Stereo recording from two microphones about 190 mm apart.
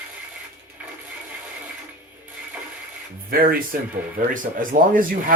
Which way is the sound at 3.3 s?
50° right (ahead or behind).